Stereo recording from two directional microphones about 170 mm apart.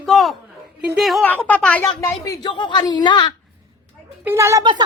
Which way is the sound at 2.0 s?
20° left (ahead or behind).